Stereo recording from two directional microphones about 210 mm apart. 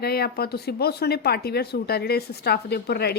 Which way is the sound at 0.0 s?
45° left (ahead or behind).